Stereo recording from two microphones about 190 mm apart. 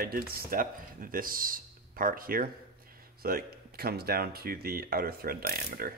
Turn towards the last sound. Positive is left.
turn(degrees=-50)  # may be behind; listen again after turning